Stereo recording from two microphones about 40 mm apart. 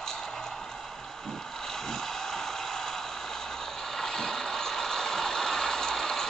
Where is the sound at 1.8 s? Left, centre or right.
Centre.